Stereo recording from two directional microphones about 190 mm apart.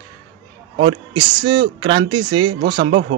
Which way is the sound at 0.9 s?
25° right (ahead or behind).